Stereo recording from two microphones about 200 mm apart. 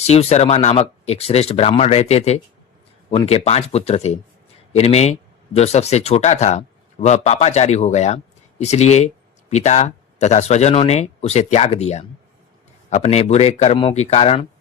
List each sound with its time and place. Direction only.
0.0 s speech: 30° left (ahead or behind)